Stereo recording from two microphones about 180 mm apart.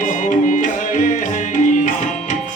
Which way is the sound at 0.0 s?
45° left (ahead or behind).